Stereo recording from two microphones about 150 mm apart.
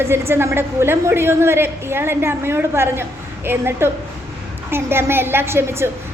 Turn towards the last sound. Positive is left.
turn(degrees=-15)  # may be behind; listen again after turning